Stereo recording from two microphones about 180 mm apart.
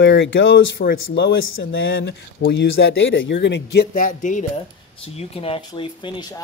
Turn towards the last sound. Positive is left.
turn(degrees=25)  # may be behind; listen again after turning